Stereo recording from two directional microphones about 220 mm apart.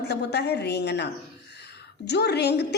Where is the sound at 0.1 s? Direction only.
50° left (ahead or behind).